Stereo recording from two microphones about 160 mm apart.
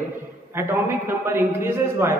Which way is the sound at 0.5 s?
15° right (ahead or behind).